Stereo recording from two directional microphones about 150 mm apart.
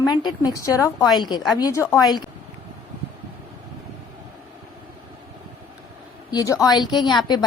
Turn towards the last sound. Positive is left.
turn(degrees=30)  # may be behind; listen again after turning